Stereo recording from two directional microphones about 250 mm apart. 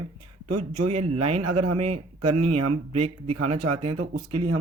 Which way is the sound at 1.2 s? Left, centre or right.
Right.